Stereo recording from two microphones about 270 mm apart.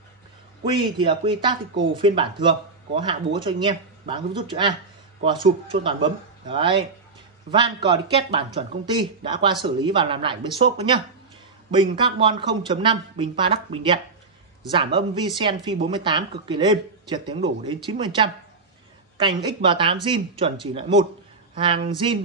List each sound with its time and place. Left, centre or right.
0.7 s speech: centre